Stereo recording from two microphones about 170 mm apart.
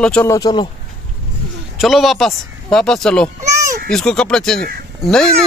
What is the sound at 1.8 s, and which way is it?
Speech, centre (ahead or behind).